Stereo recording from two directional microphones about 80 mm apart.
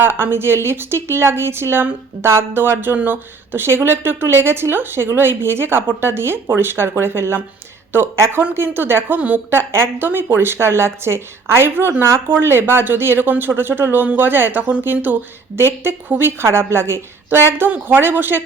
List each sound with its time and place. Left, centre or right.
0.0 s a woman's voice: right